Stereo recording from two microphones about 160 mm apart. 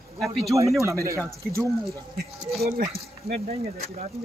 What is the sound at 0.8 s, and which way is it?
Speech, 20° right (ahead or behind).